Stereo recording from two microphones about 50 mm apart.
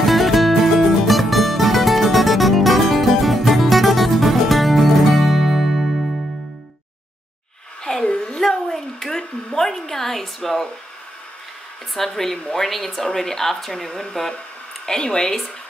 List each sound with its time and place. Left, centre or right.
0.0 s music: centre
8.0 s a sound: centre
8.4 s hair dryer: centre
12.1 s speech: centre